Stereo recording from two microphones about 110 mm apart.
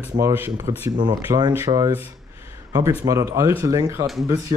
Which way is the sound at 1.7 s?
75° right (ahead or behind).